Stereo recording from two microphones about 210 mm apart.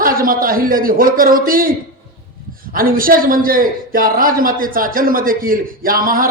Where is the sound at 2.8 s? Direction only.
40° right (ahead or behind).